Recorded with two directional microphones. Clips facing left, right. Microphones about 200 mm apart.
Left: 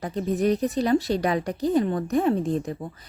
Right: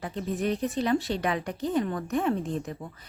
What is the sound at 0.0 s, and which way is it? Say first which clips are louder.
A woman's voice: left 6 dB; 40° left (ahead or behind).